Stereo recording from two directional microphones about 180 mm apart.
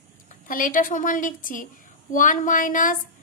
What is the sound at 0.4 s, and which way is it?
Speech, 50° left (ahead or behind).